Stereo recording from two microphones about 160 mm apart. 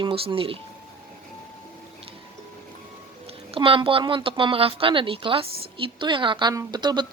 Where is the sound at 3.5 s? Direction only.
35° right (ahead or behind).